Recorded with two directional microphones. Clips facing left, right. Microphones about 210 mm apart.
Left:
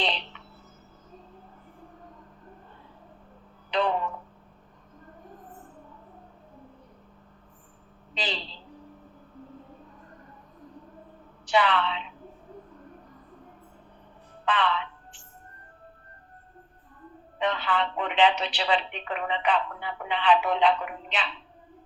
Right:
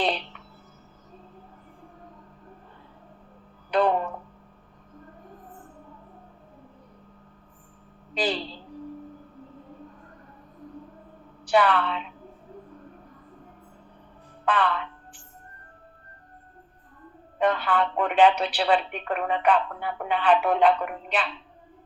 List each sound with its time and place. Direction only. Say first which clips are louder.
0.0 s a sound: right 4 dB; 55° right (ahead or behind)
3.7 s a sound: right 4 dB; 55° right (ahead or behind)
8.1 s speech: right 7 dB; 55° right (ahead or behind)
11.4 s a woman's voice: right 3 dB; 55° right (ahead or behind)
14.4 s music: right 2 dB; 55° right (ahead or behind)
17.3 s speech: right 4 dB; 55° right (ahead or behind)